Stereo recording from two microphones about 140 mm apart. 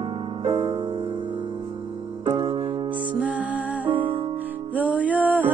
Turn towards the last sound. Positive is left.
turn(degrees=-10)  # may be behind; listen again after turning